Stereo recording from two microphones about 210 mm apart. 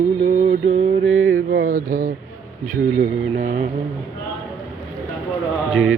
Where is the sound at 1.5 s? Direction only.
40° right (ahead or behind).